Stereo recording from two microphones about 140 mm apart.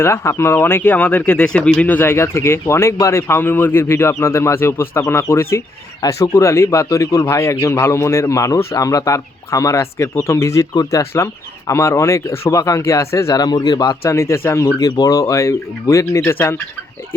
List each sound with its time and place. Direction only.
0.0 s speech: 20° left (ahead or behind)